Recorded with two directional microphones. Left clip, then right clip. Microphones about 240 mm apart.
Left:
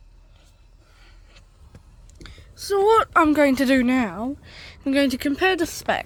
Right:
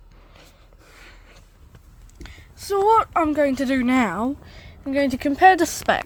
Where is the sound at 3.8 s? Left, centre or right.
Centre.